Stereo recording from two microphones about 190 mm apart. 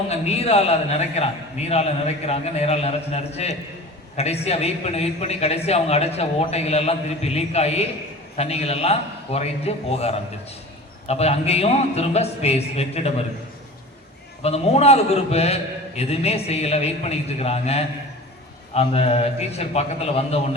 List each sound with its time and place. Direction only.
0.1 s a man's voice: 35° left (ahead or behind)
14.4 s a man's voice: 35° left (ahead or behind)